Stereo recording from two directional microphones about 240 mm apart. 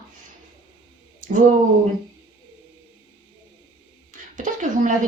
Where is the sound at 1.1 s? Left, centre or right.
Right.